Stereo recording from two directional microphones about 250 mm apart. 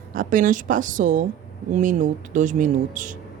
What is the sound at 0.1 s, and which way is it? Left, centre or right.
Speech, right.